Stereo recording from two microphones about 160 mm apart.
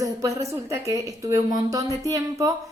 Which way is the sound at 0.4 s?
20° right (ahead or behind).